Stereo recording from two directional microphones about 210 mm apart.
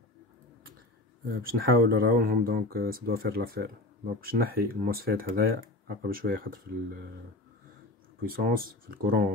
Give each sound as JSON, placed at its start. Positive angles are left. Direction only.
{"t": 1.4, "sound": "speech", "side_deg": -45}
{"t": 8.2, "sound": "speech", "side_deg": -45}